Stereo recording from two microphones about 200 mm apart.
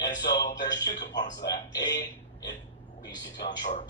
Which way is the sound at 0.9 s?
20° left (ahead or behind).